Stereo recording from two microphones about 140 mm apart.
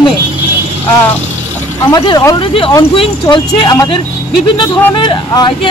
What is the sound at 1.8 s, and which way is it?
Speech, 30° left (ahead or behind).